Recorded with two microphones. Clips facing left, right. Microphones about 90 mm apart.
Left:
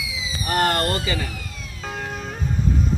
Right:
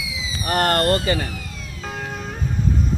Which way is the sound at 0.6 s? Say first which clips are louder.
Right 4 dB; 50° right (ahead or behind).